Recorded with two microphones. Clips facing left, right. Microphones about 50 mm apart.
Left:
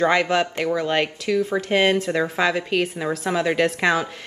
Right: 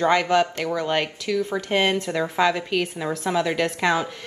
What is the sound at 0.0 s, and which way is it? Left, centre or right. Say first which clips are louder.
A woman's voice: even; left.